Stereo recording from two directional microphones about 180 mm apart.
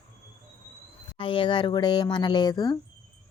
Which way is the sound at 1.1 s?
30° left (ahead or behind).